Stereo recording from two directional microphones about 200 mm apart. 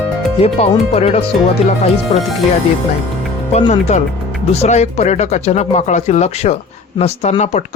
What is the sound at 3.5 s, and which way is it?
Speech, 35° left (ahead or behind).